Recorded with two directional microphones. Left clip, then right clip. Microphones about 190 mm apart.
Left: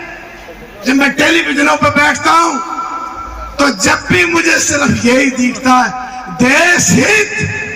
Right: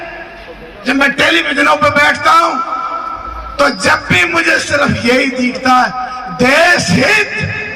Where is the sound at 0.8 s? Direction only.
30° right (ahead or behind).